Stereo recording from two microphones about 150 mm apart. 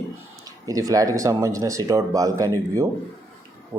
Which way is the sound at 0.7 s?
25° right (ahead or behind).